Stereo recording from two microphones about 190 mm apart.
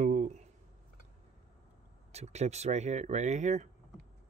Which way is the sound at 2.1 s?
35° right (ahead or behind).